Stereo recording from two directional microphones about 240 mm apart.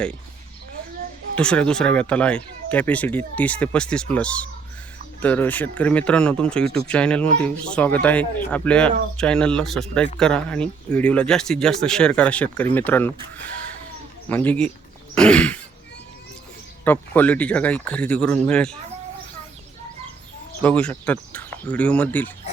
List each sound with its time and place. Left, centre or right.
1.4 s speech: centre
15.1 s throat clearing: centre
16.8 s speech: centre
20.6 s speech: centre